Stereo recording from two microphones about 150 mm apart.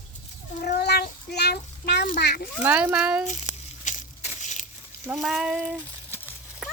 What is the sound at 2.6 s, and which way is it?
Speech, 10° right (ahead or behind).